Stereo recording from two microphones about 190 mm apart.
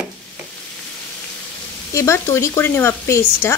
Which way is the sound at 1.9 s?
15° left (ahead or behind).